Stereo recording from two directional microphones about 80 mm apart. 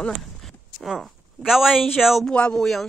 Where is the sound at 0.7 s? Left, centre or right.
Centre.